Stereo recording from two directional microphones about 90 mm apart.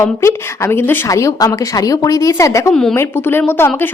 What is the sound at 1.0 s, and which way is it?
A woman's voice, 35° left (ahead or behind).